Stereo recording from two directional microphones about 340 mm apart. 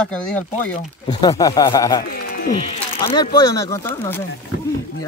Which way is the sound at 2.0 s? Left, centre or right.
Left.